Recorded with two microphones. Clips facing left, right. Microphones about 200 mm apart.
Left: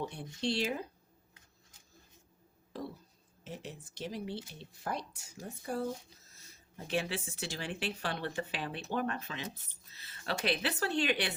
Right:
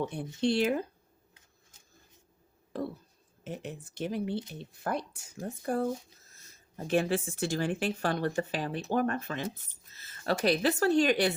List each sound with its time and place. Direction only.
0.1 s speech: 55° right (ahead or behind)
3.4 s speech: 55° right (ahead or behind)